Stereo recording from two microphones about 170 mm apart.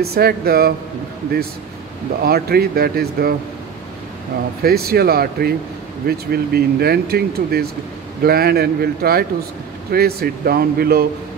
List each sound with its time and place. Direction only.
0.0 s speech: 65° right (ahead or behind)
2.2 s speech: 65° right (ahead or behind)
4.6 s speech: 65° right (ahead or behind)